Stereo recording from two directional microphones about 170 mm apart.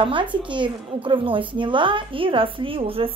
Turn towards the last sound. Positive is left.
turn(degrees=-35)  # may be behind; listen again after turning